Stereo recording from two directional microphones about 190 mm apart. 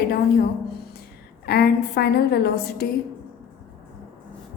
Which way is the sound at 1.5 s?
55° left (ahead or behind).